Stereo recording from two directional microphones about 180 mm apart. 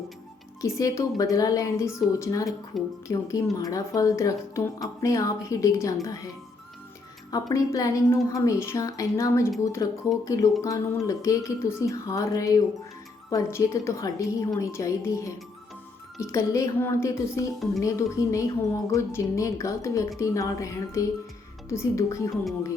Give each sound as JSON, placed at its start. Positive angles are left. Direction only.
{"t": 0.6, "sound": "speech", "side_deg": 20}
{"t": 2.7, "sound": "speech", "side_deg": 0}
{"t": 3.1, "sound": "speech", "side_deg": 15}
{"t": 7.5, "sound": "speech", "side_deg": 20}